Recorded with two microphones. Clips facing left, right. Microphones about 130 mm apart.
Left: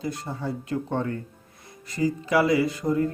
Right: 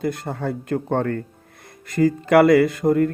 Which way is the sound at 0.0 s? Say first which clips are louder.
Right 6 dB; 60° right (ahead or behind).